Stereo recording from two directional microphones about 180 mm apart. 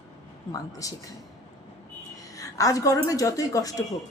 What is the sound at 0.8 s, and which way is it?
Speech, 20° left (ahead or behind).